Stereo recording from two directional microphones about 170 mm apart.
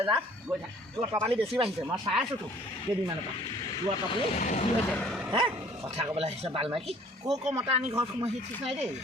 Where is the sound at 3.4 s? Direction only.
25° left (ahead or behind).